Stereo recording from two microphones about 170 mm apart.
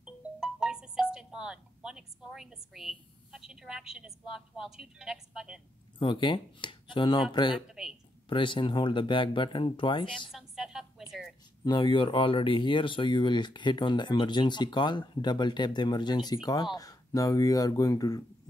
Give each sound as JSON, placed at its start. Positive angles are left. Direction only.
{"t": 0.0, "sound": "music", "side_deg": -5}
{"t": 5.9, "sound": "speech", "side_deg": 30}
{"t": 10.3, "sound": "a sound", "side_deg": -5}
{"t": 11.6, "sound": "speech", "side_deg": 25}